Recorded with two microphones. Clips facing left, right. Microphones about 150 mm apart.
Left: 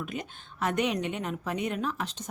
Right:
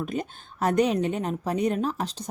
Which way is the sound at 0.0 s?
40° right (ahead or behind).